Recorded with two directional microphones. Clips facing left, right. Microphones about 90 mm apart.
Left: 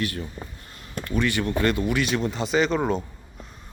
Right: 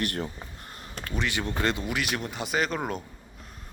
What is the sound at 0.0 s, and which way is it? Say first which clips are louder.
Speech: left 1 dB; 60° right (ahead or behind).